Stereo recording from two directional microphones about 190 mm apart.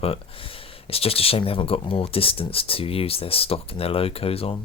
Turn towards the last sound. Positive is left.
turn(degrees=30)  # may be behind; listen again after turning